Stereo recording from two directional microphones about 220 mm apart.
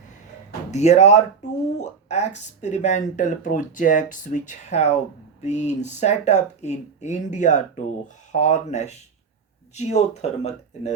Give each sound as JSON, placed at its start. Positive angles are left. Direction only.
{"t": 0.7, "sound": "speech", "side_deg": 30}